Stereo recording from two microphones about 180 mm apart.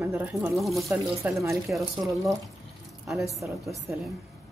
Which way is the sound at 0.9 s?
15° right (ahead or behind).